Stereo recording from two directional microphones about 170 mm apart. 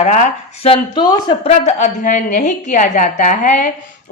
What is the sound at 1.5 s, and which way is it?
A woman's voice, 40° left (ahead or behind).